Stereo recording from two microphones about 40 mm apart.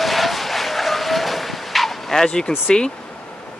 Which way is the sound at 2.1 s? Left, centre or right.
Centre.